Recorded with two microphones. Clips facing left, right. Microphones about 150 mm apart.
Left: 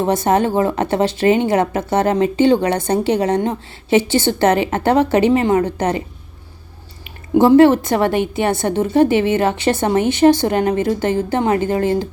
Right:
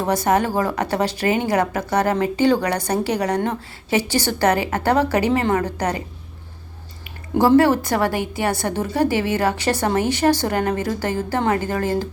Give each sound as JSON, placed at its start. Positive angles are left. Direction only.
{"t": 0.0, "sound": "speech", "side_deg": 25}
{"t": 7.3, "sound": "speech", "side_deg": 20}